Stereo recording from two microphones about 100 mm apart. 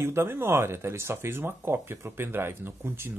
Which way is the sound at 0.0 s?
25° right (ahead or behind).